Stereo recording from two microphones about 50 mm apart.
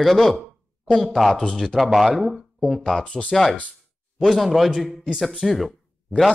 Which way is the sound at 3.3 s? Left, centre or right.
Centre.